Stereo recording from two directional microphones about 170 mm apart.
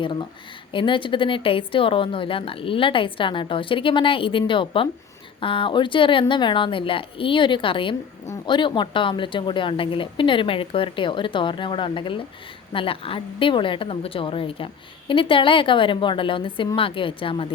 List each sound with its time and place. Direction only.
0.0 s a woman's voice: 30° left (ahead or behind)